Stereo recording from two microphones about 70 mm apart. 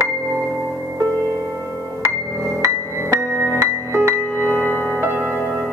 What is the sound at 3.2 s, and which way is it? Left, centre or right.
Music, left.